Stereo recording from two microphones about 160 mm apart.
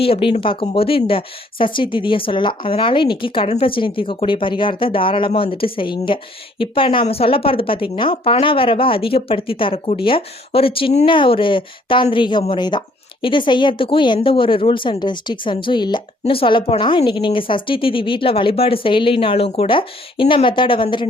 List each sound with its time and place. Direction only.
0.0 s a woman's voice: 35° left (ahead or behind)